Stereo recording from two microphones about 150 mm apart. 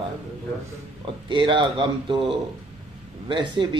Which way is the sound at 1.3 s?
35° right (ahead or behind).